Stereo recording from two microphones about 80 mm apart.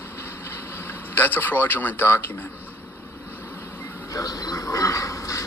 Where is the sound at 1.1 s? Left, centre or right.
Left.